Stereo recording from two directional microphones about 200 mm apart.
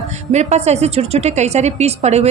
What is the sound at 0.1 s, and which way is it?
A woman's voice, 35° right (ahead or behind).